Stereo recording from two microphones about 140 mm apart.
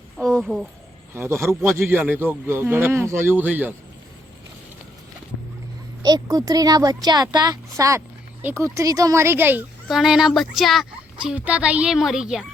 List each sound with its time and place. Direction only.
0.2 s a sound: 5° left (ahead or behind)
1.1 s a man's voice: 20° right (ahead or behind)
6.0 s speech: 25° right (ahead or behind)
9.9 s a woman's voice: 5° right (ahead or behind)